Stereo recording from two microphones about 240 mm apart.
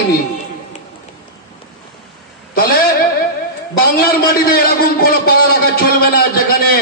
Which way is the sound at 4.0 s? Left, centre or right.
Left.